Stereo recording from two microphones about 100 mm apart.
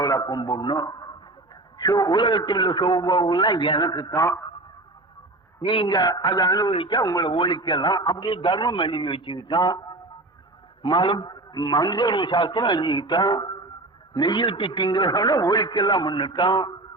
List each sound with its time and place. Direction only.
0.0 s a man's voice: 40° left (ahead or behind)
4.2 s a man's voice: 30° left (ahead or behind)
5.6 s a man's voice: 55° left (ahead or behind)
6.7 s a man's voice: 55° left (ahead or behind); by 7.3 s 40° left (ahead or behind)
7.3 s a man's voice: 55° left (ahead or behind)
10.8 s a man's voice: 55° left (ahead or behind)